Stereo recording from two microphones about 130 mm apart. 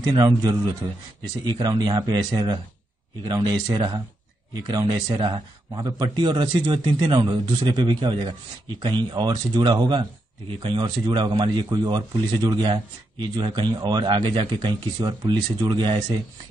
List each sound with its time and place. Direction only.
0.0 s a man's voice: 35° right (ahead or behind)